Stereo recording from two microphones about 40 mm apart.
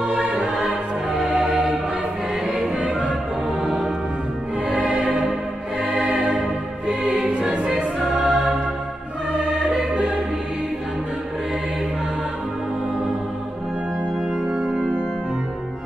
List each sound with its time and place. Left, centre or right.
0.7 s music: centre
3.6 s music: centre
6.9 s music: right
7.6 s choir: centre
9.4 s music: centre
14.5 s music: right